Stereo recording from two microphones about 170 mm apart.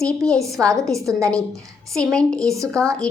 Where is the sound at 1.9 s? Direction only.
5° left (ahead or behind).